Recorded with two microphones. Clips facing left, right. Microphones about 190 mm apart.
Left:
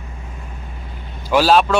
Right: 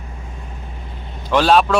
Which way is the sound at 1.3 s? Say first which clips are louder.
Even; 5° left (ahead or behind).